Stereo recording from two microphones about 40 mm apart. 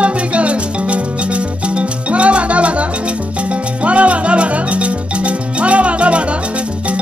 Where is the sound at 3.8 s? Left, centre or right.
Right.